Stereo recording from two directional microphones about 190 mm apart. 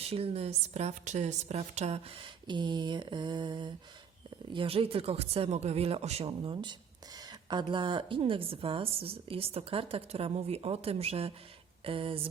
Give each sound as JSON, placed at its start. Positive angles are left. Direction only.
{"t": 0.0, "sound": "a woman's voice", "side_deg": -30}